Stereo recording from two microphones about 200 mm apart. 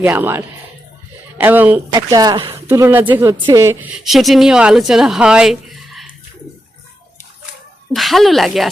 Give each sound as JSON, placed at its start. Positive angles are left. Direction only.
{"t": 0.0, "sound": "speech", "side_deg": -10}
{"t": 2.6, "sound": "speech", "side_deg": -10}
{"t": 4.0, "sound": "speech", "side_deg": 0}
{"t": 7.9, "sound": "speech", "side_deg": 0}